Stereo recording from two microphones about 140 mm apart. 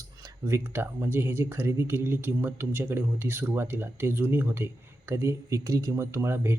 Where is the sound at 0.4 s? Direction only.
20° right (ahead or behind).